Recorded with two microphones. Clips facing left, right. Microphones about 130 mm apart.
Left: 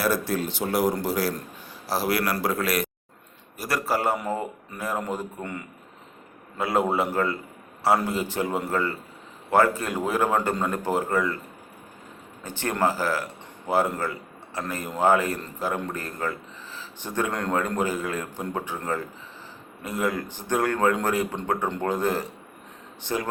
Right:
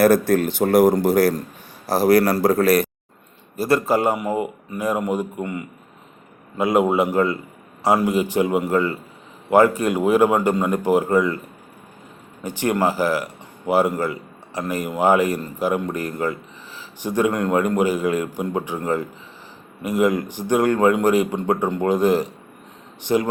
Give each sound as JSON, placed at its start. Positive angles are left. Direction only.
{"t": 0.0, "sound": "a man's voice", "side_deg": -50}
{"t": 3.6, "sound": "a man's voice", "side_deg": -25}
{"t": 12.4, "sound": "a man's voice", "side_deg": -15}